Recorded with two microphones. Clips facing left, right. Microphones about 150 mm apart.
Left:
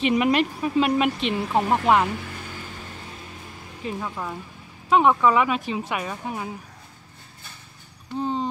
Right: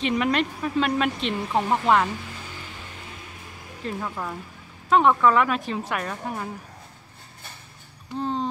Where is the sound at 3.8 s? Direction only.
5° left (ahead or behind).